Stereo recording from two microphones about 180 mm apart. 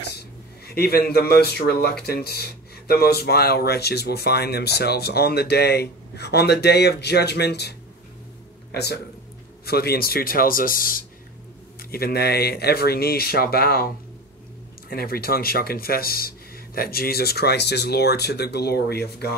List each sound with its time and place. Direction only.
0.7 s speech: 60° left (ahead or behind)
8.7 s speech: 65° left (ahead or behind)
14.9 s speech: 55° left (ahead or behind)